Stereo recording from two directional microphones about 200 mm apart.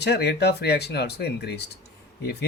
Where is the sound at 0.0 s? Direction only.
55° left (ahead or behind).